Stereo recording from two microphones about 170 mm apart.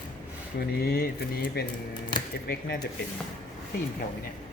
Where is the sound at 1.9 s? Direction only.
25° left (ahead or behind).